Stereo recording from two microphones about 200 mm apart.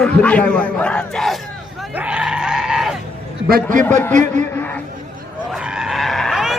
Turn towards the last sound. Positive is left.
turn(degrees=0)  # may be behind; listen again after turning